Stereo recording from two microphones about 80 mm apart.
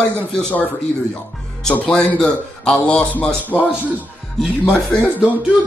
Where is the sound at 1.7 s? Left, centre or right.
Centre.